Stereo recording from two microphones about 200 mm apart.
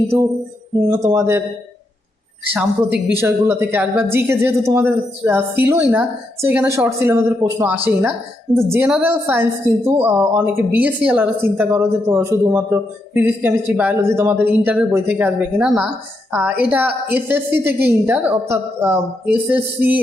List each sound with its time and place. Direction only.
0.9 s a woman's voice: 15° right (ahead or behind)
3.2 s a woman's voice: 15° right (ahead or behind)